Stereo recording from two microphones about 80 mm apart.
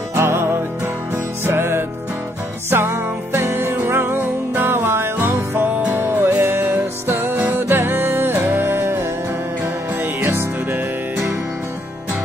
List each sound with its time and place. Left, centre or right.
0.1 s music: right